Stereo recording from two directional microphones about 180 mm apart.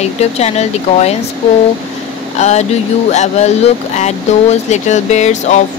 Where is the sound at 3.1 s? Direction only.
40° left (ahead or behind).